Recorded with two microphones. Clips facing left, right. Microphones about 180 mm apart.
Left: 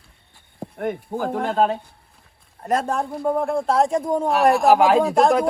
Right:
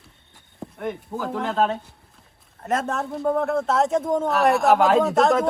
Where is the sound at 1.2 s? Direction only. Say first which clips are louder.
Left 3 dB; 50° left (ahead or behind).